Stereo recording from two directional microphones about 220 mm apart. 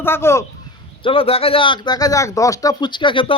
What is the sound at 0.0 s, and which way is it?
Speech, 10° left (ahead or behind).